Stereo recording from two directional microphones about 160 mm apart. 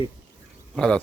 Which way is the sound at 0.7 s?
5° left (ahead or behind).